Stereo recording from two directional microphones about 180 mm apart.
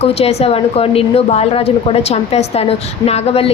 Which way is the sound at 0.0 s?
35° left (ahead or behind).